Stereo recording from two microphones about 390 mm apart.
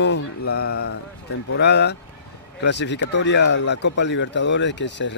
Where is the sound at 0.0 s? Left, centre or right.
Left.